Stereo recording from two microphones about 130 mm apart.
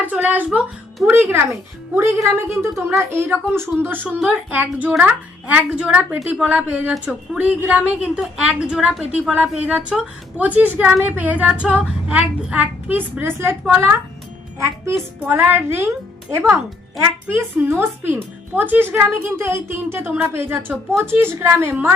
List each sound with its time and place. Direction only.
0.0 s a child's voice: 15° right (ahead or behind)
15.2 s a woman's voice: 15° right (ahead or behind)